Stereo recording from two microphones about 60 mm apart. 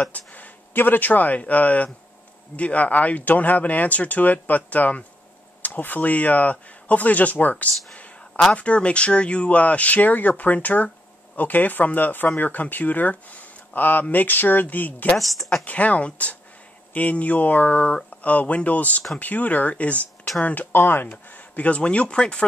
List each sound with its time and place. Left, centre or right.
0.0 s speech: left
15.1 s speech: centre
15.6 s speech: left
21.1 s speech: left